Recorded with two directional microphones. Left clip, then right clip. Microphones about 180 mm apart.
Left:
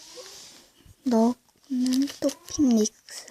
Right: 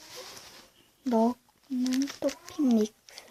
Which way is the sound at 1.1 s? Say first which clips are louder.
Left 3 dB; 40° left (ahead or behind).